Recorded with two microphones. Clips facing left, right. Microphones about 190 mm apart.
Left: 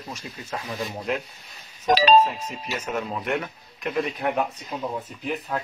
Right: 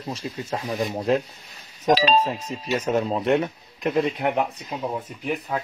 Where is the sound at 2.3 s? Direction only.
30° right (ahead or behind).